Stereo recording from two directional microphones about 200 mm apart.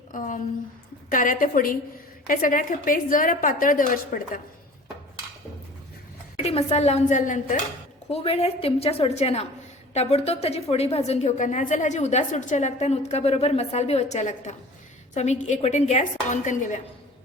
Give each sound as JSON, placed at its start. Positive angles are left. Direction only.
{"t": 0.1, "sound": "a sound", "side_deg": 40}
{"t": 1.1, "sound": "a woman's voice", "side_deg": 40}
{"t": 6.3, "sound": "a woman's voice", "side_deg": 30}
{"t": 8.1, "sound": "a woman's voice", "side_deg": 30}